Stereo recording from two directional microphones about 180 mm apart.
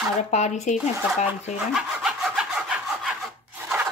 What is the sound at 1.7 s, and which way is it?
Sawing, 5° right (ahead or behind).